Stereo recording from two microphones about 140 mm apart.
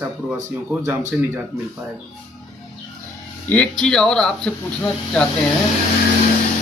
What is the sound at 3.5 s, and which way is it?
Speech, 5° left (ahead or behind).